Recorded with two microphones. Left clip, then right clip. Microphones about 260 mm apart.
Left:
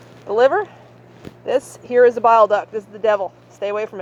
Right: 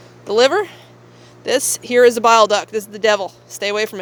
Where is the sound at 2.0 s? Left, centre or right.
Right.